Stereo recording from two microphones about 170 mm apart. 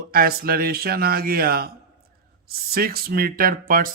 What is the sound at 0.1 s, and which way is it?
Speech, 60° right (ahead or behind).